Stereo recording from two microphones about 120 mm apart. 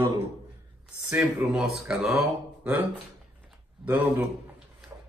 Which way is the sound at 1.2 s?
5° right (ahead or behind).